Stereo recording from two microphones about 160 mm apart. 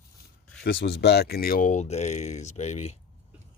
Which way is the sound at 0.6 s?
90° left.